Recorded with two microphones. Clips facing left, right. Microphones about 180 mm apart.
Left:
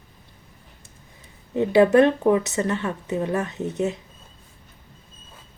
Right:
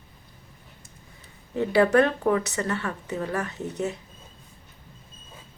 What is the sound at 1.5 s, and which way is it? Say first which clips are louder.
A woman's voice: left 4 dB; 20° left (ahead or behind).